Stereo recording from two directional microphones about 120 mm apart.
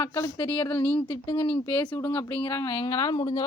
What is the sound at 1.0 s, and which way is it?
Speech, 45° left (ahead or behind).